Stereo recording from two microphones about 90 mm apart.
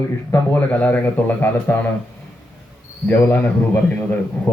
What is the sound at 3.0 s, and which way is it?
Speech, 20° left (ahead or behind).